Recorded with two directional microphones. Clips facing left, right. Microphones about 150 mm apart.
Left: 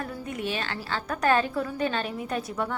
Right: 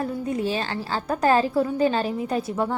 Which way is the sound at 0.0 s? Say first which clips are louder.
Right 7 dB; 30° right (ahead or behind).